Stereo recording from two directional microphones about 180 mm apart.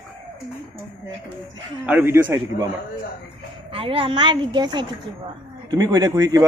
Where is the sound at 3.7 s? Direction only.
30° right (ahead or behind).